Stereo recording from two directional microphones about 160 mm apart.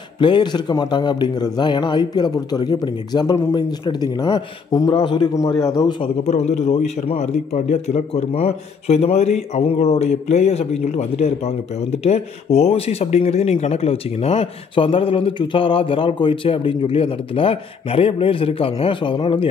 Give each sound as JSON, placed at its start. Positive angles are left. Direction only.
{"t": 0.2, "sound": "speech", "side_deg": 30}
{"t": 6.2, "sound": "a man's voice", "side_deg": 45}